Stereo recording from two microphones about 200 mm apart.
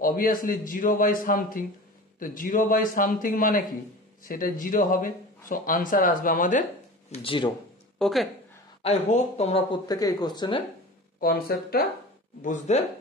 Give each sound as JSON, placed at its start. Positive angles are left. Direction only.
{"t": 0.0, "sound": "speech", "side_deg": 45}
{"t": 7.1, "sound": "speech", "side_deg": 25}
{"t": 8.0, "sound": "speech", "side_deg": 0}
{"t": 8.8, "sound": "speech", "side_deg": 30}
{"t": 11.1, "sound": "speech", "side_deg": 45}